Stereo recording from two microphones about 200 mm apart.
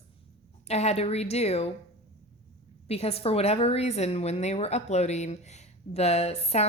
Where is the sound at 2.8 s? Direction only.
30° left (ahead or behind).